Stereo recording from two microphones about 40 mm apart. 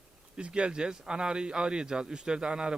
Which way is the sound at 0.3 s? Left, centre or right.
Right.